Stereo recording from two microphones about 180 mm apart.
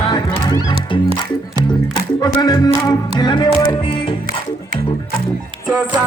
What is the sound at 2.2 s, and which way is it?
Music, 20° left (ahead or behind).